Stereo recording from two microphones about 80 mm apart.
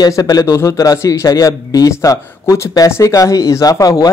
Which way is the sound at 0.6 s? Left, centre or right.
Left.